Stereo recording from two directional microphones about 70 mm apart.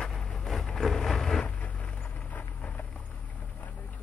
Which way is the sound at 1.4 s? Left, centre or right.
Left.